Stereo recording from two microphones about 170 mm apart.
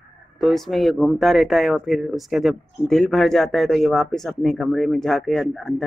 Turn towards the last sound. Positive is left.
turn(degrees=0)  # may be behind; listen again after turning